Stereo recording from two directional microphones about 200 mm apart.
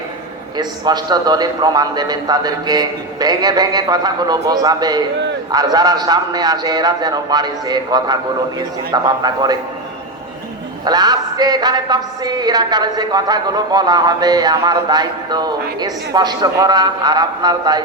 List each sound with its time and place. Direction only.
0.5 s a woman's voice: 20° right (ahead or behind)
10.8 s a woman's voice: 20° right (ahead or behind)